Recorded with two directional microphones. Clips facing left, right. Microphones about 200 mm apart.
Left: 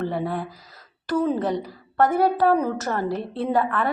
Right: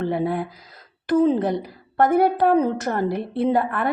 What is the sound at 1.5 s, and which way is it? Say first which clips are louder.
A woman's voice: right 1 dB; 15° right (ahead or behind).